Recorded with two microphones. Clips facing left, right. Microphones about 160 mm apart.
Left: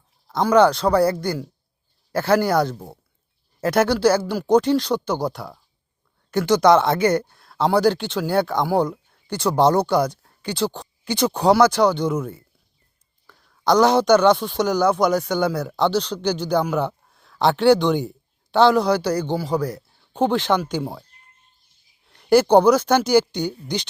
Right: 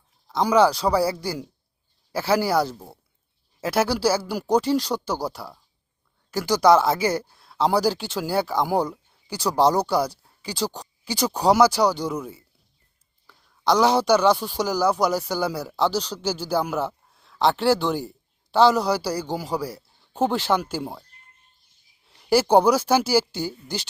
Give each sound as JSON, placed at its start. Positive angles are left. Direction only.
{"t": 0.4, "sound": "speech", "side_deg": -5}
{"t": 2.7, "sound": "speech", "side_deg": 15}
{"t": 3.6, "sound": "speech", "side_deg": -5}
{"t": 13.2, "sound": "speech", "side_deg": -5}
{"t": 22.1, "sound": "speech", "side_deg": -5}